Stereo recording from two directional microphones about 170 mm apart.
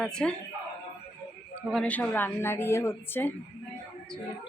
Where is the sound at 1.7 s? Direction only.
5° left (ahead or behind).